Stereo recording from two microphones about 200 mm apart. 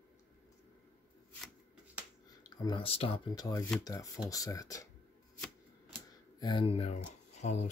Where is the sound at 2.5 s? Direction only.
20° left (ahead or behind).